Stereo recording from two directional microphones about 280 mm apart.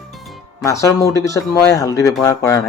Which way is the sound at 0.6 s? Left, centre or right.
Centre.